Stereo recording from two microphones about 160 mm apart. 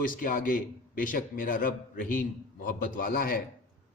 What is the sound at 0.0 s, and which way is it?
A man's voice, 60° left (ahead or behind).